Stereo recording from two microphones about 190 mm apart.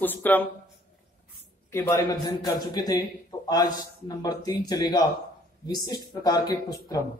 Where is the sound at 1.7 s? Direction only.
15° left (ahead or behind).